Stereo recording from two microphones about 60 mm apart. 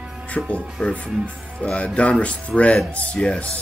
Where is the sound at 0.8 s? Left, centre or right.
Centre.